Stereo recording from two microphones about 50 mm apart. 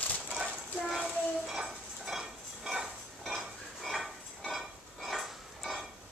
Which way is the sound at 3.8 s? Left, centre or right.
Centre.